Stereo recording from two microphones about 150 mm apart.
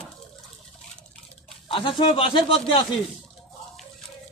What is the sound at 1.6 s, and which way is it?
A man's voice, 35° left (ahead or behind).